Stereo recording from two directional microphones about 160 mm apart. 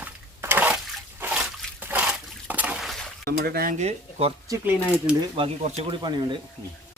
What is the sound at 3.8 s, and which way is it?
Speech, 40° right (ahead or behind).